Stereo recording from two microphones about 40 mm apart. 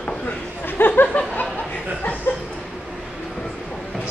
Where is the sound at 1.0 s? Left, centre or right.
Left.